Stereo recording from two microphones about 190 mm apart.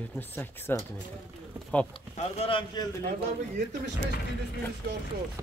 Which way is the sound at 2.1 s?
30° left (ahead or behind).